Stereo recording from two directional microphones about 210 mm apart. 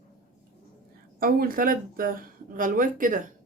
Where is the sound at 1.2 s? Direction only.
45° right (ahead or behind).